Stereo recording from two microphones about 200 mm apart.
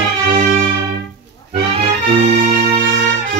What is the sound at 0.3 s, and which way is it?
Music, 45° right (ahead or behind).